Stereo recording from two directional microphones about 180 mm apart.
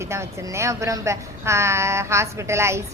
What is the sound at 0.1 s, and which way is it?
A woman's voice, 15° right (ahead or behind).